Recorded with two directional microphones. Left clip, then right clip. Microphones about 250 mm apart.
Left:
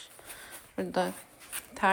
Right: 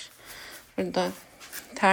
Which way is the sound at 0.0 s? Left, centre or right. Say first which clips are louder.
Right 4 dB; centre.